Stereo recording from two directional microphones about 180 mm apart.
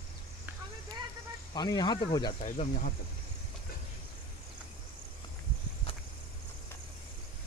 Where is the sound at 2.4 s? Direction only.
45° left (ahead or behind).